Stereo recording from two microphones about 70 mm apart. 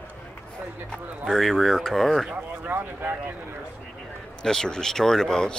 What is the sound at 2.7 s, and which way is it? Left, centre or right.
Speech, right.